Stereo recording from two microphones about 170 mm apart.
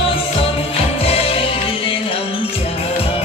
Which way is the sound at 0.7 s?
35° left (ahead or behind).